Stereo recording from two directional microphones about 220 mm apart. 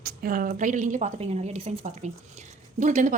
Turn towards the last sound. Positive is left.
turn(degrees=-35)  # may be behind; listen again after turning